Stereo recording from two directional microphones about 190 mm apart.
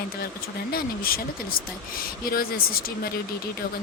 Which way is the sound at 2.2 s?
50° left (ahead or behind).